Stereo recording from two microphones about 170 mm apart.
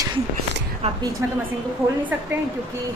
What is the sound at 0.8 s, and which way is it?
Speech, 40° right (ahead or behind).